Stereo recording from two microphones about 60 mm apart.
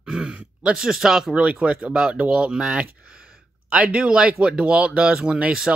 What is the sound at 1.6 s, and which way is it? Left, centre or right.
Speech, right.